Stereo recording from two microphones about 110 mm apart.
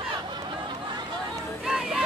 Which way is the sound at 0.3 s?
45° right (ahead or behind).